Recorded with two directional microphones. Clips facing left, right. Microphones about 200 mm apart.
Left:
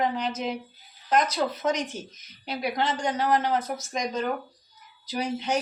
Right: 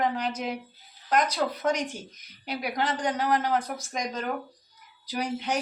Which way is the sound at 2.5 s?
10° right (ahead or behind).